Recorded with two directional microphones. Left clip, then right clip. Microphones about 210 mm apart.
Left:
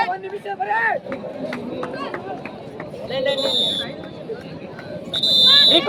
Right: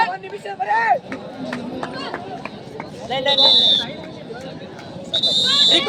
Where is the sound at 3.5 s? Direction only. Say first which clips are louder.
Right 6 dB; 35° left (ahead or behind).